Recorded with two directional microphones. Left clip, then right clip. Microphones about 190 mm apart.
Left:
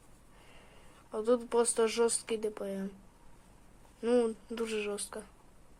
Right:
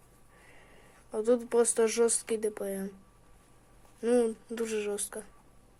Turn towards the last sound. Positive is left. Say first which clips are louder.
# right 3 dB
turn(degrees=-15)  # may be behind; listen again after turning